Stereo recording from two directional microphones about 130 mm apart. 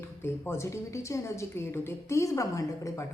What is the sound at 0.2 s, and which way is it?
Speech, 20° left (ahead or behind).